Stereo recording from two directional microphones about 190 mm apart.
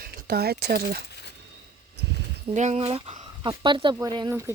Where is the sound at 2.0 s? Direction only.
60° right (ahead or behind).